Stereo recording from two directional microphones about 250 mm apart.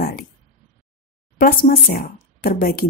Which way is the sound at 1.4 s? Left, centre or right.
Left.